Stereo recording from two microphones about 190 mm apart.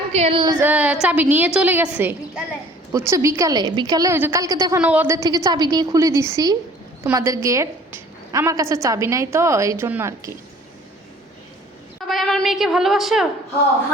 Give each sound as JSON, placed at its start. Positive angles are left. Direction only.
{"t": 0.1, "sound": "speech", "side_deg": -30}
{"t": 0.6, "sound": "a sound", "side_deg": -5}
{"t": 1.0, "sound": "a woman's voice", "side_deg": -10}
{"t": 11.9, "sound": "cat", "side_deg": 0}